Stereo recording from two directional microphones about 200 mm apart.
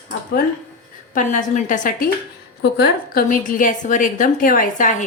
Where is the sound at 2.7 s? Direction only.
60° left (ahead or behind).